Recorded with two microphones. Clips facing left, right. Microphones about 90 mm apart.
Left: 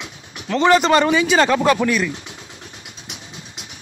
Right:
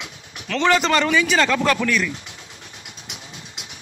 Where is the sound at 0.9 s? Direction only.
25° left (ahead or behind).